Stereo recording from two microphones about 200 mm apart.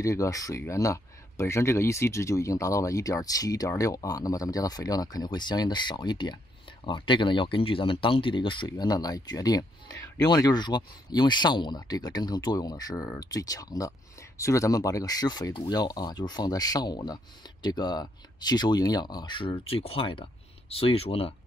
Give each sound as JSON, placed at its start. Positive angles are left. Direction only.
{"t": 0.0, "sound": "speech", "side_deg": 15}